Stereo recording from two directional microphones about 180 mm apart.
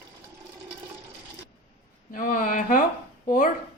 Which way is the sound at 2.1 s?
50° left (ahead or behind).